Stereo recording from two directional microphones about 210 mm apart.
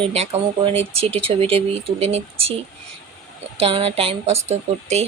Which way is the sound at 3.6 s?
25° right (ahead or behind).